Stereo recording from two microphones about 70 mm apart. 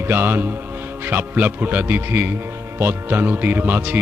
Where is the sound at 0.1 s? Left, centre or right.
Right.